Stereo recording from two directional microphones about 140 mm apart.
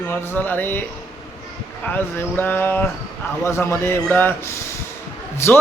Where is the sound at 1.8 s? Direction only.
15° left (ahead or behind).